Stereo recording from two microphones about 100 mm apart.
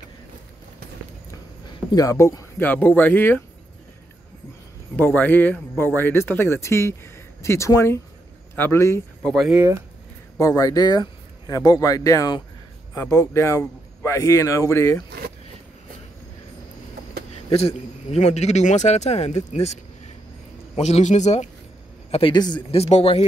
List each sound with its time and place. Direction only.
1.9 s speech: 35° left (ahead or behind)
2.6 s speech: 20° left (ahead or behind)
4.9 s speech: 20° left (ahead or behind)
10.4 s speech: 35° left (ahead or behind)
17.3 s a man's voice: 90° left
22.3 s speech: 45° left (ahead or behind)
22.7 s a man's voice: 90° left